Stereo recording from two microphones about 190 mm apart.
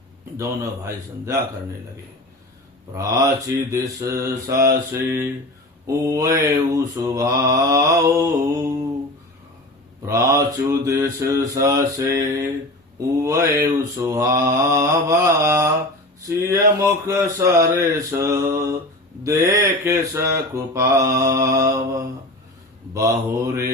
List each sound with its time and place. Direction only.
0.3 s mantra: 15° right (ahead or behind)
2.9 s mantra: 15° right (ahead or behind)
10.1 s mantra: 15° right (ahead or behind)